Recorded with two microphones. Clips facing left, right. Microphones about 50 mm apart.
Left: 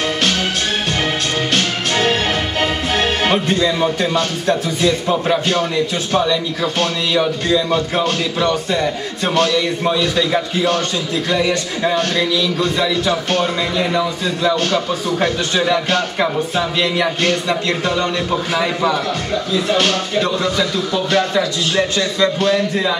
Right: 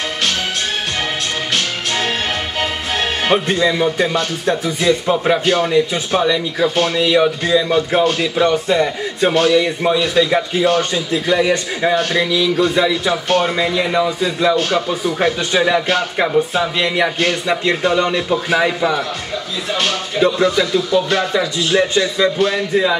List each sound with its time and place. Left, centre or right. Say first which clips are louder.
2.6 s speech: left 3 dB; centre